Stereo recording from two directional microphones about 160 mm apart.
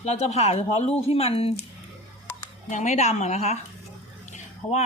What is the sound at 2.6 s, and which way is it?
Speech, 50° left (ahead or behind).